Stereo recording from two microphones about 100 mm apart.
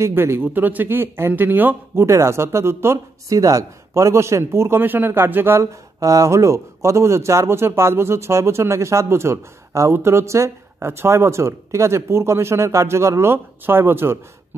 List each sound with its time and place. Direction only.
0.0 s speech: 25° right (ahead or behind)